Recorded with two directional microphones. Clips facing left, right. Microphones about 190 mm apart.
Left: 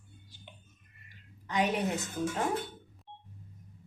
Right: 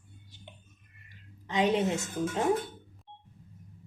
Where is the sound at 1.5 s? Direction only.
20° right (ahead or behind).